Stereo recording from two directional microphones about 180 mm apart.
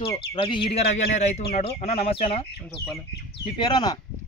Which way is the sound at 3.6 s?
25° left (ahead or behind).